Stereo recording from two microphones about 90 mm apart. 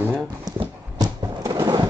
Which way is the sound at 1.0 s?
40° right (ahead or behind).